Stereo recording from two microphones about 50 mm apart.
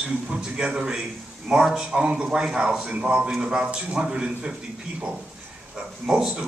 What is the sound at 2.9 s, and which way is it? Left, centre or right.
Speech, right.